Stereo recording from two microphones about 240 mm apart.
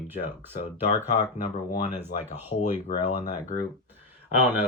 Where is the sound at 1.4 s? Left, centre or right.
Left.